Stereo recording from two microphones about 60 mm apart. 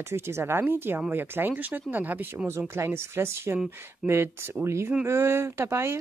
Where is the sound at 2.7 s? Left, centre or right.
Right.